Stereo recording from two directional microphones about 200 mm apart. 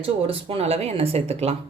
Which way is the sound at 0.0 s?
30° right (ahead or behind).